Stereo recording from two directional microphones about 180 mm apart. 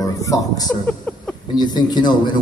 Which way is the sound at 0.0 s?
20° left (ahead or behind).